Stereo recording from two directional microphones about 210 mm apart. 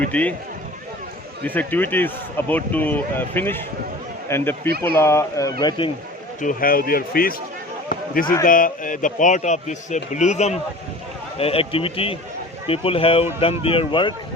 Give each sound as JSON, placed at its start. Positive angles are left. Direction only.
{"t": 0.1, "sound": "speech", "side_deg": 5}
{"t": 1.5, "sound": "speech", "side_deg": 10}
{"t": 6.4, "sound": "a man's voice", "side_deg": 40}
{"t": 7.9, "sound": "a sound", "side_deg": 40}
{"t": 8.4, "sound": "a man's voice", "side_deg": 40}